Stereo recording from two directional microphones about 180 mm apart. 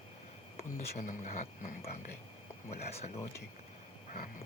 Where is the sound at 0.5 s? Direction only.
40° left (ahead or behind).